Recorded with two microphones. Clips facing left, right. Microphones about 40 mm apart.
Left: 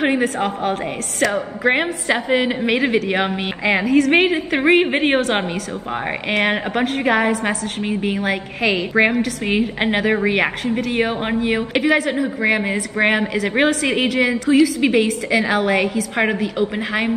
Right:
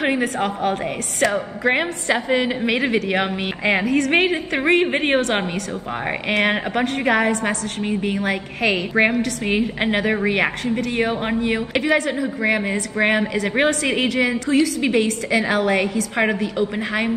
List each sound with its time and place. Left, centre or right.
1.6 s a woman's voice: centre
4.6 s a woman's voice: centre
6.4 s a woman's voice: centre
10.9 s speech: left
11.2 s a woman's voice: centre